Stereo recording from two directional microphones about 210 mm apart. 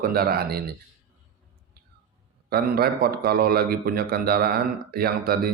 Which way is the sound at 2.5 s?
45° right (ahead or behind).